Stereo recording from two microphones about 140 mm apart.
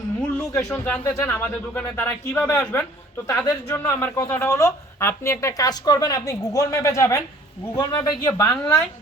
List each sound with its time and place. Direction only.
0.5 s a woman's voice: 20° left (ahead or behind)